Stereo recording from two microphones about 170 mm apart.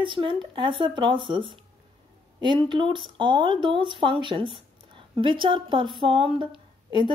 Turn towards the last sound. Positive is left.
turn(degrees=-25)  # may be behind; listen again after turning